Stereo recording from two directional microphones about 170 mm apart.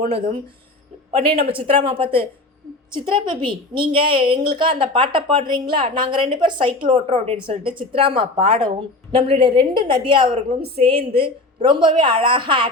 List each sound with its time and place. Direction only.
0.1 s a woman's voice: 35° right (ahead or behind)